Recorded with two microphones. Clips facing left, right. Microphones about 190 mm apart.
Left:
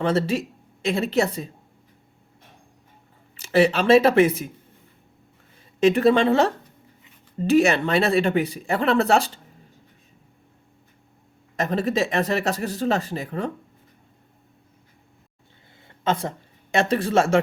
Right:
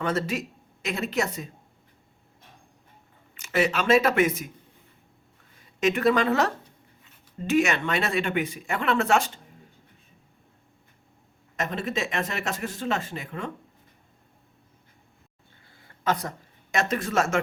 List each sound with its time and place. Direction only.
0.0 s speech: 30° left (ahead or behind)
3.3 s speech: 35° left (ahead or behind)
5.8 s a woman's voice: 30° left (ahead or behind)
11.5 s speech: 35° left (ahead or behind)
15.8 s a sound: 25° left (ahead or behind)
16.7 s speech: 30° left (ahead or behind)